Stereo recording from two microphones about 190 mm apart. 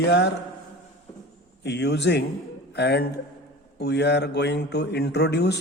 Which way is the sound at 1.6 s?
65° left (ahead or behind).